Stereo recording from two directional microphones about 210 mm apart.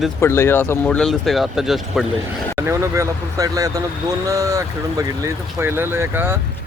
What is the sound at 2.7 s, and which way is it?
Speech, 15° right (ahead or behind).